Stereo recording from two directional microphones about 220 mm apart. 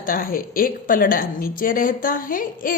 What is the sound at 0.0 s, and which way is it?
A woman's voice, 40° left (ahead or behind).